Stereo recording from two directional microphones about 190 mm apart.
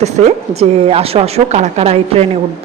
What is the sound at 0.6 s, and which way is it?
A woman's voice, 30° right (ahead or behind).